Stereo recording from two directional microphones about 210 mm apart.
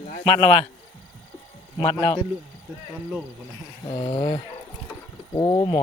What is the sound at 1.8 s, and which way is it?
Speech, 20° left (ahead or behind).